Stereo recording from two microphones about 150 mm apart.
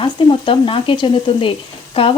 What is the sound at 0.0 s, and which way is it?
Sizzle, 35° left (ahead or behind).